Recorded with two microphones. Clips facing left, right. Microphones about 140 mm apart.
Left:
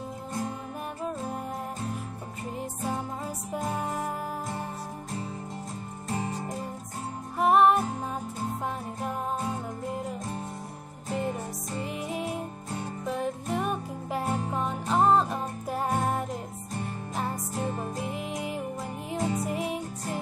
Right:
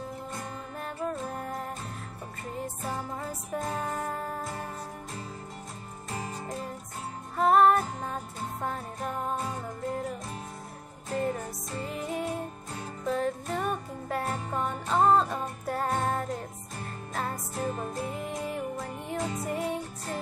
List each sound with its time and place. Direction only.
3.2 s music: 15° left (ahead or behind)
7.3 s music: 20° left (ahead or behind)
11.1 s music: 25° left (ahead or behind)
17.6 s music: 30° left (ahead or behind)
19.0 s music: 30° left (ahead or behind)